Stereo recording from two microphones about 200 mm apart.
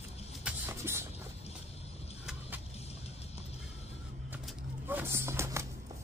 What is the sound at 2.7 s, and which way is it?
Music, 30° left (ahead or behind).